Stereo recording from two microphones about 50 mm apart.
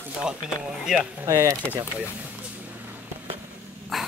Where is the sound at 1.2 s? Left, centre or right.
Right.